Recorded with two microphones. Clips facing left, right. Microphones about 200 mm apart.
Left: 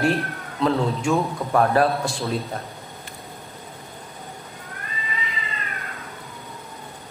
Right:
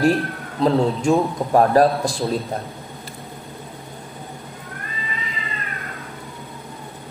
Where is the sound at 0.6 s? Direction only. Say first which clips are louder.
Right 4 dB; 35° right (ahead or behind).